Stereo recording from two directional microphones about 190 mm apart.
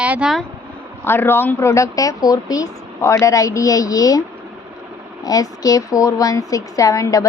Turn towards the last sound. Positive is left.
turn(degrees=15)  # may be behind; listen again after turning